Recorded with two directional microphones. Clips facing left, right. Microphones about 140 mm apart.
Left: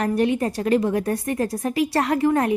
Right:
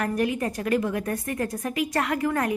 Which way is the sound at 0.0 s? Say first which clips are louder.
Left 5 dB; 30° left (ahead or behind).